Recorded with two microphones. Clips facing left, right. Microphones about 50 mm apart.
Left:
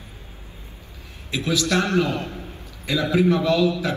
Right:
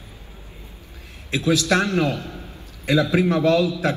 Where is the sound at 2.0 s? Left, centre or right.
Left.